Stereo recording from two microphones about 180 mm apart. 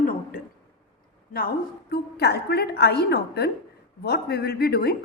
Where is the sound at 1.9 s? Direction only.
65° left (ahead or behind).